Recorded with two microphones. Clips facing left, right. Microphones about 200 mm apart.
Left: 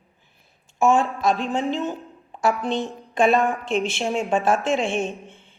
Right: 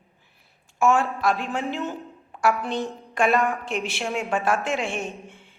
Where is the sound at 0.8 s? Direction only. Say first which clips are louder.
Left 2 dB; 15° left (ahead or behind).